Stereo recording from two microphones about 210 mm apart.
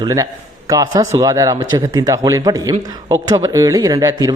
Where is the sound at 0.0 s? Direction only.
15° right (ahead or behind).